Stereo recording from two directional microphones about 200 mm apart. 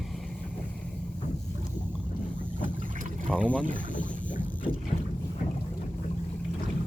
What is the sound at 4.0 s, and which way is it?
Boat, 5° left (ahead or behind).